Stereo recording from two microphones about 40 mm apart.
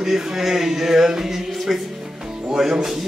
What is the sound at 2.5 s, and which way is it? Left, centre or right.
Speech, centre.